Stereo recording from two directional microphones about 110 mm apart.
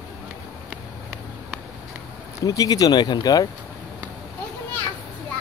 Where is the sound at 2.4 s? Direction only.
35° left (ahead or behind).